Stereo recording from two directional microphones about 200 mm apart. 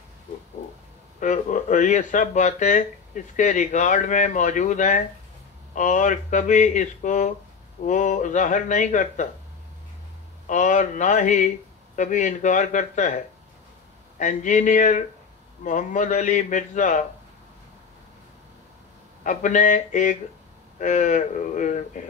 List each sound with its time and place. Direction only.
1.2 s a man's voice: 40° left (ahead or behind)
10.4 s a man's voice: 40° left (ahead or behind)
19.2 s a man's voice: 40° left (ahead or behind)